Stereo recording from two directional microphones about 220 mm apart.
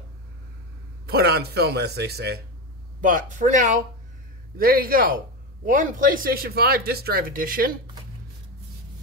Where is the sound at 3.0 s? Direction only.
35° right (ahead or behind).